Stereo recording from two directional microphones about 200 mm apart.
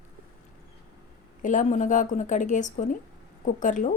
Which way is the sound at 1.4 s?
40° left (ahead or behind).